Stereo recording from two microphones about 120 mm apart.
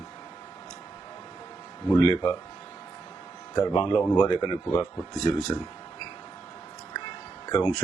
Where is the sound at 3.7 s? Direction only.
40° left (ahead or behind).